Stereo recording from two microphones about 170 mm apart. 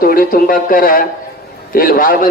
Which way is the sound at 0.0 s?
55° left (ahead or behind).